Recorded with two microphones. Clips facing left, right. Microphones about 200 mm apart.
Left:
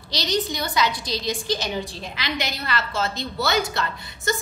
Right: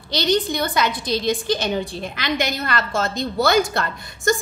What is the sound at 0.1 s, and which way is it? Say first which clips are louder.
A woman's voice: right 5 dB; 55° right (ahead or behind).